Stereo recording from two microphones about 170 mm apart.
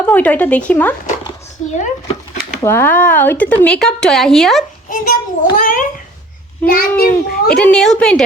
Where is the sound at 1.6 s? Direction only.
40° left (ahead or behind).